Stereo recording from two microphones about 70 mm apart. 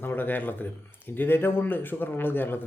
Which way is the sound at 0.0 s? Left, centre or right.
Left.